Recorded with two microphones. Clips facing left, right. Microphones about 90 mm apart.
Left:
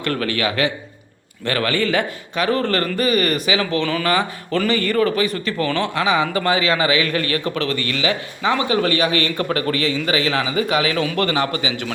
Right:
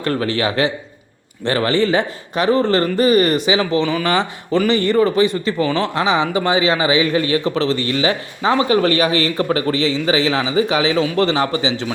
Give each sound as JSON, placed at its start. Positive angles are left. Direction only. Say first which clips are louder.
{"t": 0.0, "sound": "a man's voice", "louder": "right 3 dB", "side_deg": -25}